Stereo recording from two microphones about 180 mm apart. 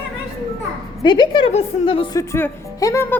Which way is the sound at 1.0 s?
25° left (ahead or behind).